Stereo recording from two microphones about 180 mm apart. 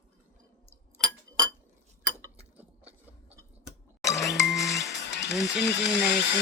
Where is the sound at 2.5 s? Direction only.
10° right (ahead or behind).